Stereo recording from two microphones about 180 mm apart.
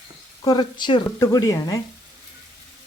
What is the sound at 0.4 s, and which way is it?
A woman's voice, 25° left (ahead or behind).